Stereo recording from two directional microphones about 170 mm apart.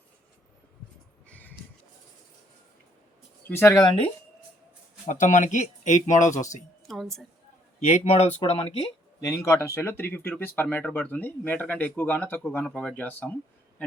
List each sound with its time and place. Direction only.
1.3 s a sound: 10° left (ahead or behind)
3.5 s speech: 15° left (ahead or behind)
5.0 s speech: 45° left (ahead or behind)
6.8 s a sound: centre (ahead or behind)
7.8 s speech: 45° left (ahead or behind)
9.2 s speech: 20° left (ahead or behind)